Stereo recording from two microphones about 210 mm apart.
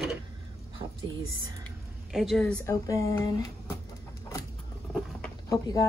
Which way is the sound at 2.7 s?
15° left (ahead or behind).